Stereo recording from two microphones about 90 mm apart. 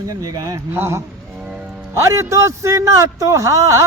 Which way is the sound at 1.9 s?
35° right (ahead or behind).